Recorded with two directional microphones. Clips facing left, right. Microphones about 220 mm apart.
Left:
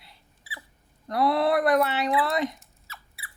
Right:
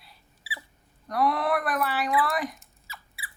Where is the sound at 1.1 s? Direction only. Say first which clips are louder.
Left 3 dB; 25° left (ahead or behind).